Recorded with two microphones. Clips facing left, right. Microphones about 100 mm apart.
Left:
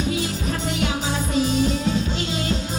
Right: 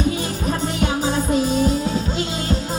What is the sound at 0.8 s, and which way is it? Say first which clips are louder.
Music: right 4 dB; 45° right (ahead or behind).